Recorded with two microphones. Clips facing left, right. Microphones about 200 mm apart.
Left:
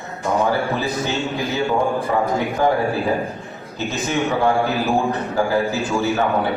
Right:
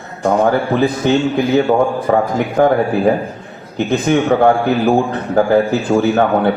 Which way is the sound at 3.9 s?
55° right (ahead or behind).